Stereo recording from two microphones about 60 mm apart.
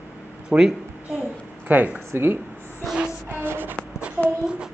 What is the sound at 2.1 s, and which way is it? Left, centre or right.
Speech, right.